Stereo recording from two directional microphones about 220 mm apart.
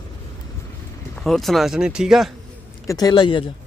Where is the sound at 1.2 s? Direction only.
Centre (ahead or behind).